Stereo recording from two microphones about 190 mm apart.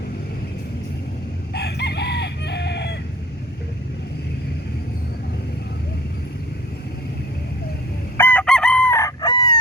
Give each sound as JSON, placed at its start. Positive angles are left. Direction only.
{"t": 1.5, "sound": "chicken", "side_deg": 60}
{"t": 8.2, "sound": "chicken", "side_deg": 10}